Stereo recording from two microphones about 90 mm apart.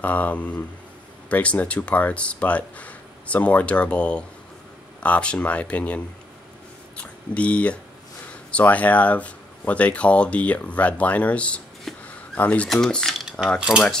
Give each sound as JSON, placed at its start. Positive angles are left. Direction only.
{"t": 0.0, "sound": "speech", "side_deg": 15}
{"t": 11.9, "sound": "a sound", "side_deg": 0}
{"t": 12.4, "sound": "speech", "side_deg": 15}
{"t": 12.6, "sound": "cutlery", "side_deg": 5}
{"t": 13.6, "sound": "cutlery", "side_deg": -5}